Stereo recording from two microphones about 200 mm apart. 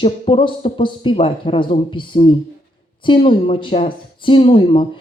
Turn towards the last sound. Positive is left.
turn(degrees=25)  # may be behind; listen again after turning